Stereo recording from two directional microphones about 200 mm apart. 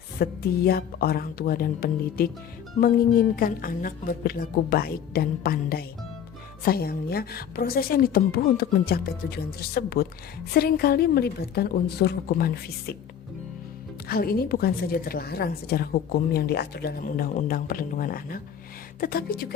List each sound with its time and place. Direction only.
0.2 s speech: 50° left (ahead or behind)
14.1 s speech: 50° left (ahead or behind)